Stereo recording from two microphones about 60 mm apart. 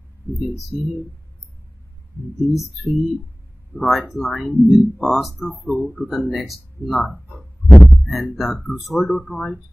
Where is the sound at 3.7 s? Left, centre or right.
Centre.